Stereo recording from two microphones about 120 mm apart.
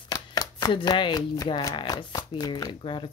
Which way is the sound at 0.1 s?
30° left (ahead or behind).